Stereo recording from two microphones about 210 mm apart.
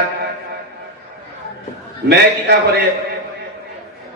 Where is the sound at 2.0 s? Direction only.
50° right (ahead or behind).